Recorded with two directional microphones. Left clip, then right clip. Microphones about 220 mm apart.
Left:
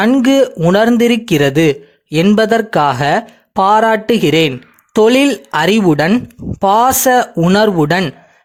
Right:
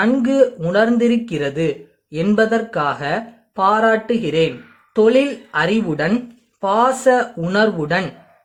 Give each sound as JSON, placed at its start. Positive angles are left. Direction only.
{"t": 0.0, "sound": "speech", "side_deg": 45}